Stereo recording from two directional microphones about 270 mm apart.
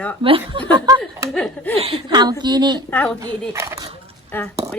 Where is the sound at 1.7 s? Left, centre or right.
Centre.